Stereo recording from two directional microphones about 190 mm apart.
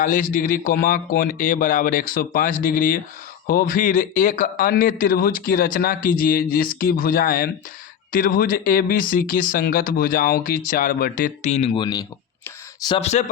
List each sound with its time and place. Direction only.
0.0 s a man's voice: 45° left (ahead or behind); by 12.0 s 25° left (ahead or behind)
13.0 s speech: 35° left (ahead or behind)